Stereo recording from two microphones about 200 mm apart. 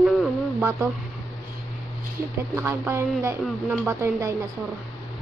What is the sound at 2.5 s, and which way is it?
Speech, 10° right (ahead or behind).